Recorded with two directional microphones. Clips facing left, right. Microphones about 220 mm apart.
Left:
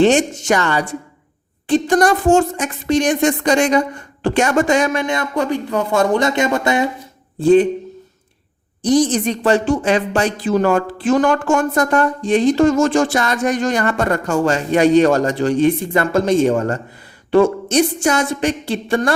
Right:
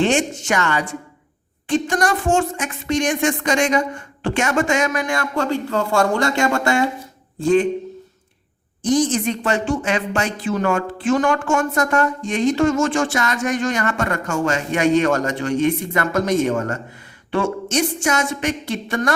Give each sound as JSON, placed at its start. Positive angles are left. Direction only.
{"t": 0.0, "sound": "speech", "side_deg": 40}
{"t": 7.4, "sound": "speech", "side_deg": 35}
{"t": 8.8, "sound": "speech", "side_deg": 35}